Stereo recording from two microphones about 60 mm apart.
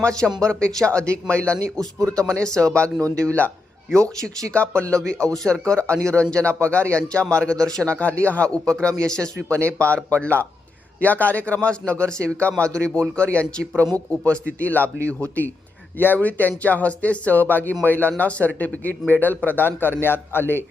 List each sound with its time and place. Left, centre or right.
0.0 s speech: centre
4.5 s speech: centre
5.6 s speech: centre
9.6 s speech: left
16.0 s a man's voice: left